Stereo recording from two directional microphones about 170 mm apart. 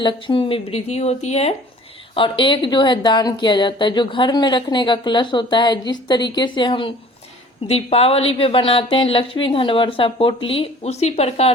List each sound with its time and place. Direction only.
0.0 s a woman's voice: 30° left (ahead or behind)